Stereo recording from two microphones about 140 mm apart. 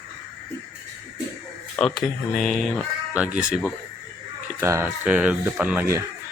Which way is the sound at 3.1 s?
10° right (ahead or behind).